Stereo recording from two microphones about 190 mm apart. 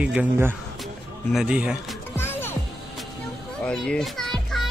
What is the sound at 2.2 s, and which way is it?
Music, 10° left (ahead or behind).